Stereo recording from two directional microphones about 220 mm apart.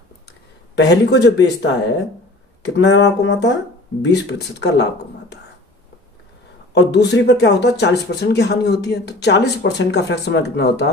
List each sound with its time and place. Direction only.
0.8 s speech: 50° left (ahead or behind)
6.7 s speech: 50° left (ahead or behind)